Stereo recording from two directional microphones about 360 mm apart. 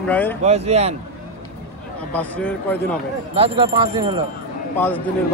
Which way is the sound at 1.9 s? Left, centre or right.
Centre.